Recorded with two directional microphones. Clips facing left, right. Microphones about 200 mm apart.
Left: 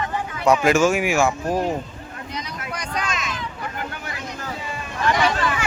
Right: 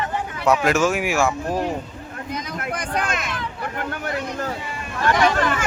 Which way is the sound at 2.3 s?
55° right (ahead or behind).